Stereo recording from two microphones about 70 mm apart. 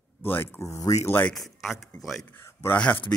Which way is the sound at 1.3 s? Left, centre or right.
Centre.